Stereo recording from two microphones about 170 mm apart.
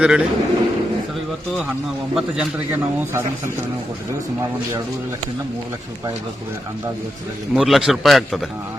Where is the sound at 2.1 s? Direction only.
5° right (ahead or behind).